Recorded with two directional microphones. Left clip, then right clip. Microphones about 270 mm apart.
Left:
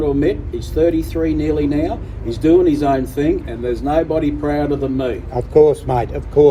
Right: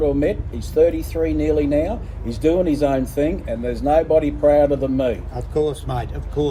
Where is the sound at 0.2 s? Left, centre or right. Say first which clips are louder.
Left 3 dB; centre.